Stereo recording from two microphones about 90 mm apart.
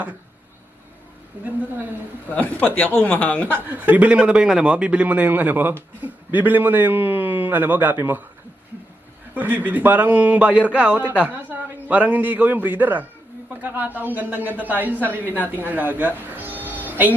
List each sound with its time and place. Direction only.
1.3 s a man's voice: 15° right (ahead or behind)
2.3 s speech: 15° left (ahead or behind)
3.5 s a man's voice: 20° right (ahead or behind)
9.3 s a man's voice: 20° right (ahead or behind)
16.6 s music: 20° right (ahead or behind)